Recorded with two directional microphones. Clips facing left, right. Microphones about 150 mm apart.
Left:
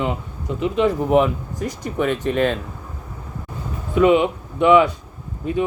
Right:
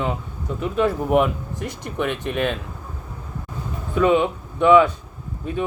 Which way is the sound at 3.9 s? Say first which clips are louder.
Left 3 dB; 15° left (ahead or behind).